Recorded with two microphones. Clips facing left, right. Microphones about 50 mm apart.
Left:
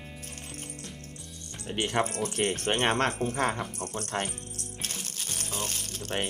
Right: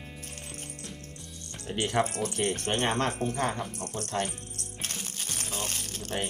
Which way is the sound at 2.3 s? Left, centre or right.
Left.